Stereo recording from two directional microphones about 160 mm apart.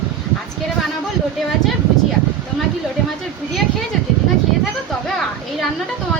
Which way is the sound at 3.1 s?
Centre (ahead or behind).